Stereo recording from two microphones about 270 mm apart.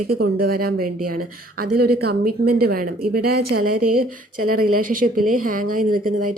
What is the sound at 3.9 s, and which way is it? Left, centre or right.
Speech, right.